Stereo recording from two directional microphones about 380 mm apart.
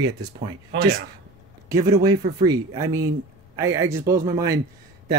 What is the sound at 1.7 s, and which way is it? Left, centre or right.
Speech, centre.